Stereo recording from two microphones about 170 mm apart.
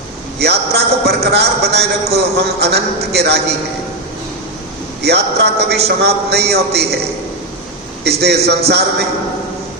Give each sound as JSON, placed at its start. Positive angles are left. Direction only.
{"t": 0.3, "sound": "a man's voice", "side_deg": -70}
{"t": 5.0, "sound": "a man's voice", "side_deg": -75}
{"t": 8.0, "sound": "a man's voice", "side_deg": -75}